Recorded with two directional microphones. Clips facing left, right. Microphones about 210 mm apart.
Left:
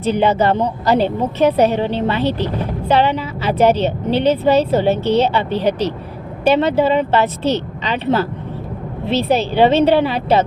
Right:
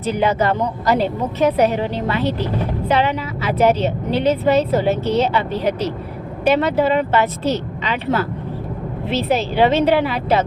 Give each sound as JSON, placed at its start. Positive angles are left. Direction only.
{"t": 0.1, "sound": "a woman's voice", "side_deg": 30}